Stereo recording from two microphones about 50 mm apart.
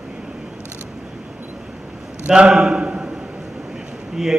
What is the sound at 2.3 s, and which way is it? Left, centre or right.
Speech, centre.